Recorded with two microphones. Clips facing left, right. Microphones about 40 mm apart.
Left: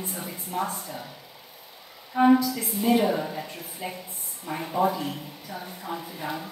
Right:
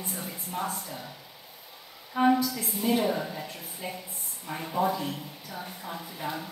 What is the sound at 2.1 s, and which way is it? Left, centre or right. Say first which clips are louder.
Speech: left 4 dB; centre.